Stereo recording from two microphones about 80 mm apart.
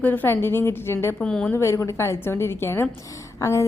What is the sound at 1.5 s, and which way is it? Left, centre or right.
A woman's voice, left.